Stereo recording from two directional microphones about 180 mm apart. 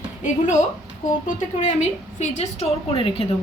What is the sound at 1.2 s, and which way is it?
A woman's voice, 40° left (ahead or behind).